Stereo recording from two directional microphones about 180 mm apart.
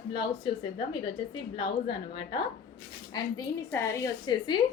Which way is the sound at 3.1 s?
15° left (ahead or behind).